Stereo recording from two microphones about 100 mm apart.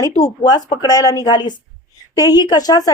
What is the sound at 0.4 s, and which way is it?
A woman's voice, 40° left (ahead or behind).